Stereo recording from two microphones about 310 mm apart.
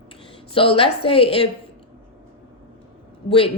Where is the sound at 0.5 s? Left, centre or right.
Centre.